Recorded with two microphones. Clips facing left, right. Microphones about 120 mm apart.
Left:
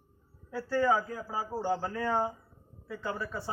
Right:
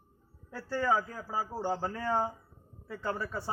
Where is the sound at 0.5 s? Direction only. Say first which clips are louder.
Left 3 dB; 10° left (ahead or behind).